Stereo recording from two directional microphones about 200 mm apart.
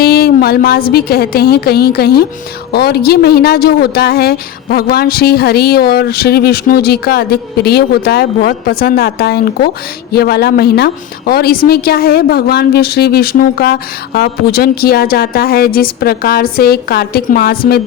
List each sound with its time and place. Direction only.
0.0 s a woman's voice: 50° left (ahead or behind)